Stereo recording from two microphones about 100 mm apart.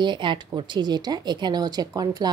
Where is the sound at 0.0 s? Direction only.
50° right (ahead or behind).